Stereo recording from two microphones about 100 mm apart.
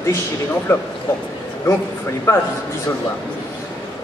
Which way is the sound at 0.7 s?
25° left (ahead or behind).